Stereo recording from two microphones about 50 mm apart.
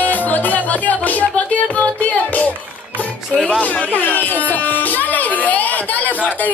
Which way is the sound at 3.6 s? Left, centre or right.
Left.